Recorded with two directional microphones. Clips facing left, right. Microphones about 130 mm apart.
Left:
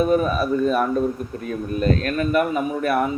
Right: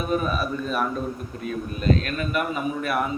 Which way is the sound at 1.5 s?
45° left (ahead or behind).